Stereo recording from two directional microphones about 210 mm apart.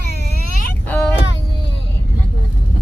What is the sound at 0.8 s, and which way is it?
Speech, 10° left (ahead or behind).